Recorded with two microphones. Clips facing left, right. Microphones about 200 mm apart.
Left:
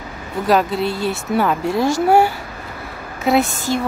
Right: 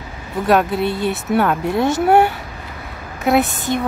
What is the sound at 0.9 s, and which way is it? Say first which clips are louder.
Speech: right 1 dB; 20° right (ahead or behind).